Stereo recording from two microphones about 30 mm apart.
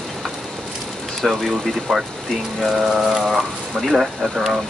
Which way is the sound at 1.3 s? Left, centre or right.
Centre.